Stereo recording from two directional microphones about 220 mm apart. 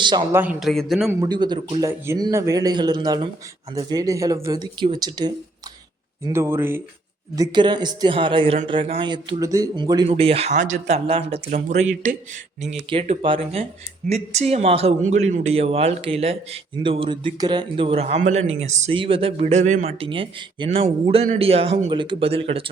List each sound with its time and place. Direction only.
0.0 s speech: 20° right (ahead or behind)
0.4 s a man's voice: centre (ahead or behind)
1.2 s speech: 20° right (ahead or behind)